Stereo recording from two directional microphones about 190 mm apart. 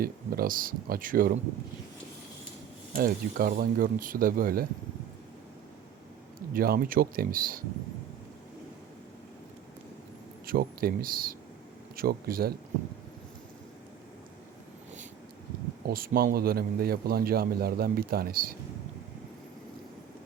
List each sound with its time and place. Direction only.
0.0 s a man's voice: 50° right (ahead or behind)
2.9 s a man's voice: 50° right (ahead or behind)
6.5 s a man's voice: 50° right (ahead or behind)
10.4 s a man's voice: 50° right (ahead or behind)
15.9 s a man's voice: 50° right (ahead or behind)